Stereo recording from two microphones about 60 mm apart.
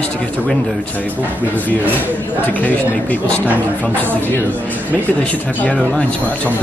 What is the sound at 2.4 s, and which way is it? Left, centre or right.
Speech, left.